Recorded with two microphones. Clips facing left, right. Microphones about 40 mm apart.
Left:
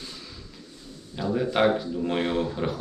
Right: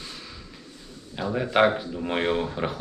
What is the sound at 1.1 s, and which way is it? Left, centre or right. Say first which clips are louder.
Speech: right 2 dB; right.